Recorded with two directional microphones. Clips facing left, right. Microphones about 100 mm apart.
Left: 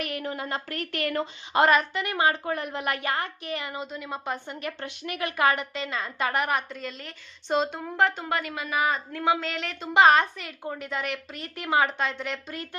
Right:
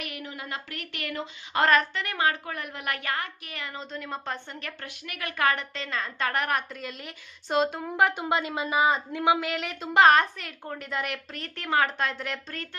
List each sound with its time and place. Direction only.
0.0 s speech: 40° left (ahead or behind)
1.7 s a woman's voice: 10° left (ahead or behind)
3.7 s a woman's voice: 5° left (ahead or behind); by 5.3 s 25° left (ahead or behind)
5.3 s a woman's voice: 15° left (ahead or behind)
6.8 s a woman's voice: 10° right (ahead or behind)